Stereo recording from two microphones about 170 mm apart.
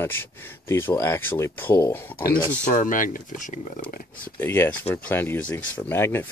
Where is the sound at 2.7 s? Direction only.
50° left (ahead or behind).